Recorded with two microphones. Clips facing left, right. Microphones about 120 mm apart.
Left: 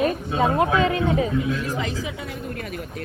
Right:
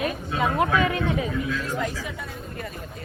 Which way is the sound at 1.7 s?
90° left.